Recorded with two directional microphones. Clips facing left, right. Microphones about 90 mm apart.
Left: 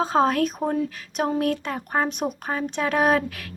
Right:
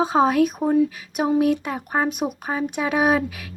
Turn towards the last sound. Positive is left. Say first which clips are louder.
# right 1 dB
turn(degrees=-10)  # may be behind; listen again after turning